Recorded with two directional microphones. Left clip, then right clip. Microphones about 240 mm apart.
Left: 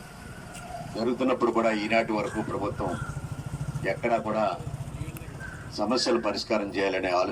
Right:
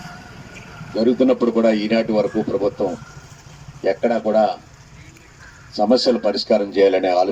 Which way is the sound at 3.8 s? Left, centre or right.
Right.